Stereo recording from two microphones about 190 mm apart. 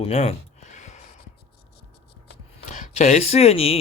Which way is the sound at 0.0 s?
35° left (ahead or behind).